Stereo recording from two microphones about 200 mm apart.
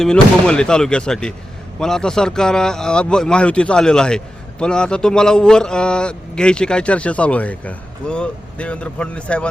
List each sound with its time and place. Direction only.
0.0 s a man's voice: 5° left (ahead or behind)